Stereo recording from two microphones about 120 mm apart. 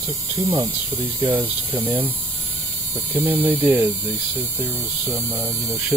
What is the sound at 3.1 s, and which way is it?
Speech, 15° right (ahead or behind).